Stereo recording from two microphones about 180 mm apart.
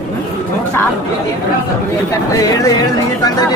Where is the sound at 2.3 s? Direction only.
20° left (ahead or behind).